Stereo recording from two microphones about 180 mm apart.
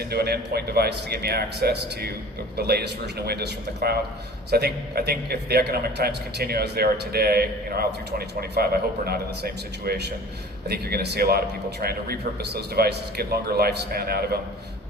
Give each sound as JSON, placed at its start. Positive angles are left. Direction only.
{"t": 0.0, "sound": "a man's voice", "side_deg": -65}